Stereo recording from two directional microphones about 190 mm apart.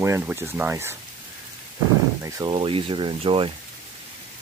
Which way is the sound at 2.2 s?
20° right (ahead or behind).